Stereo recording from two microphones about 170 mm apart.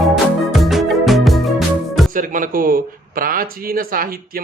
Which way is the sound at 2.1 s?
50° right (ahead or behind).